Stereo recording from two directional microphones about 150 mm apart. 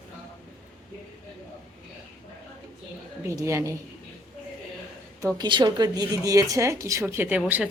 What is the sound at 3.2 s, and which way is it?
Speech, 20° right (ahead or behind).